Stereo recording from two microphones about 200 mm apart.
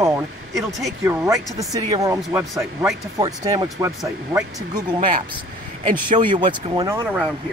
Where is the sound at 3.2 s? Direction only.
20° right (ahead or behind).